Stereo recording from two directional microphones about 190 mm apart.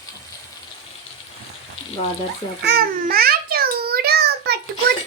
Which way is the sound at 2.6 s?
55° right (ahead or behind).